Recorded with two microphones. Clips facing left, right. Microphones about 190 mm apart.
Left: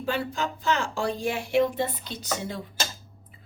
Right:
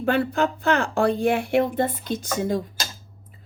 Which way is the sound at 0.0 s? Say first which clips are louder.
Right 7 dB; 55° right (ahead or behind).